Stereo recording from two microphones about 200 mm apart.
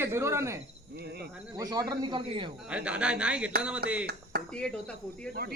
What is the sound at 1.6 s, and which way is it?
Speech, 20° right (ahead or behind).